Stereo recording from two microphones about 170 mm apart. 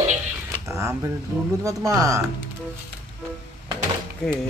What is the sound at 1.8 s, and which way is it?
Music, 20° right (ahead or behind).